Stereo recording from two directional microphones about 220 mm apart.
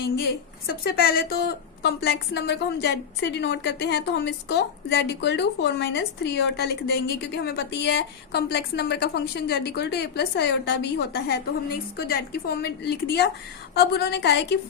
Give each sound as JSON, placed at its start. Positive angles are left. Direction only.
{"t": 0.7, "sound": "a woman's voice", "side_deg": 45}